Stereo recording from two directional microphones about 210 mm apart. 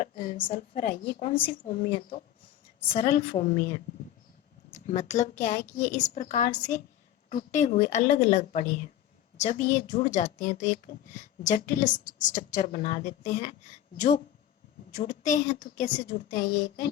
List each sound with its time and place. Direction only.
0.0 s a sound: 35° left (ahead or behind)
0.3 s a woman's voice: 25° left (ahead or behind)
14.9 s speech: 35° left (ahead or behind)